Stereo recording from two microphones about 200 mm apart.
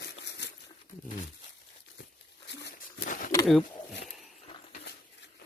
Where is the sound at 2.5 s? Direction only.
55° left (ahead or behind).